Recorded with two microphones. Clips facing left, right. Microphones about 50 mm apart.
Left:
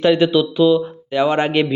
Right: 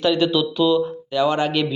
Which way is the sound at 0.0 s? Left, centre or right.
Left.